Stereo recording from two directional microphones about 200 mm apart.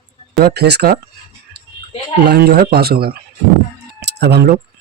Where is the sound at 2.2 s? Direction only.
55° right (ahead or behind).